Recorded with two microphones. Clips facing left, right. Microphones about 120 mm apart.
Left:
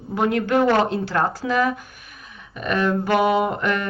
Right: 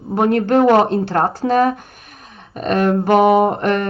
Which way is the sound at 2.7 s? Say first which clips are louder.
Right 6 dB; 45° right (ahead or behind).